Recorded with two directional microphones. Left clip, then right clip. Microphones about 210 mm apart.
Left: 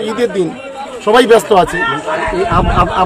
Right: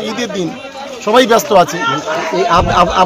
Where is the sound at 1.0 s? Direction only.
Centre (ahead or behind).